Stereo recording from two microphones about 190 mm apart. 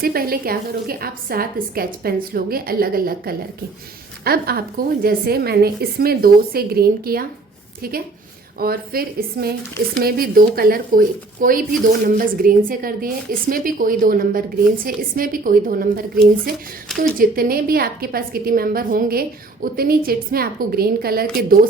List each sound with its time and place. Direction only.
0.0 s a woman's voice: 50° right (ahead or behind)